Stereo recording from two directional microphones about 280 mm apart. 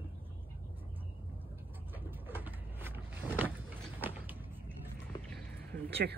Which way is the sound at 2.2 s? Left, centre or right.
Centre.